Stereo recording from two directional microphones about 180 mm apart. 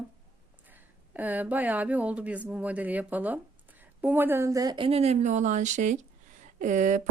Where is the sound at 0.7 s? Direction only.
10° right (ahead or behind).